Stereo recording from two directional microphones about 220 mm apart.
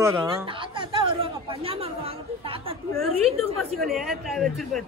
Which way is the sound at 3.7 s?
Centre (ahead or behind).